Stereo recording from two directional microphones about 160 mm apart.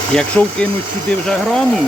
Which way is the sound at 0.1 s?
5° left (ahead or behind).